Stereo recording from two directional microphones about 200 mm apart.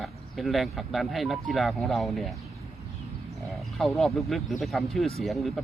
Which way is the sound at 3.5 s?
Centre (ahead or behind).